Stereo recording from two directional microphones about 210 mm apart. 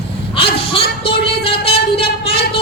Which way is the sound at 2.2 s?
25° left (ahead or behind).